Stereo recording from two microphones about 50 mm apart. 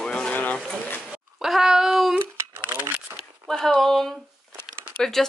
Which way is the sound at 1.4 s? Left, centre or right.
Centre.